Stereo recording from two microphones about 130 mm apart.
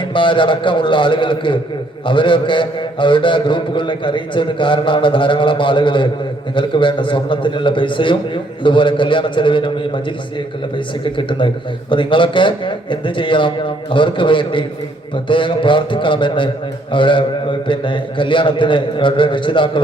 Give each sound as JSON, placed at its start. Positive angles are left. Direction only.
{"t": 0.0, "sound": "a man's voice", "side_deg": 40}